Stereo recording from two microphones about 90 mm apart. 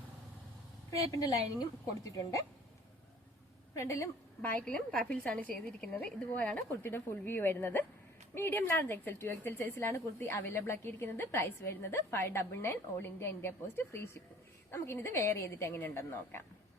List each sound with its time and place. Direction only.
1.1 s a woman's voice: 40° left (ahead or behind)
3.8 s a woman's voice: 35° left (ahead or behind)
4.4 s a woman's voice: 15° left (ahead or behind)